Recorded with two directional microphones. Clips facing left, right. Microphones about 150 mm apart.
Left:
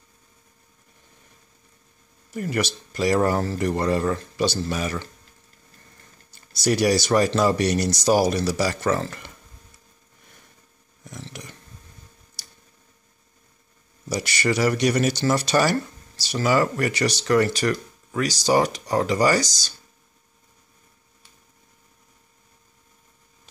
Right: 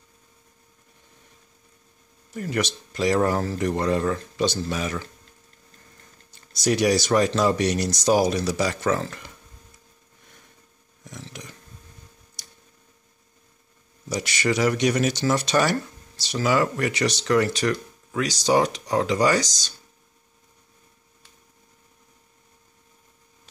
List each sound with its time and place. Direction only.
2.3 s speech: 5° left (ahead or behind)
6.3 s speech: centre (ahead or behind)
11.1 s a sound: centre (ahead or behind)
14.0 s speech: centre (ahead or behind)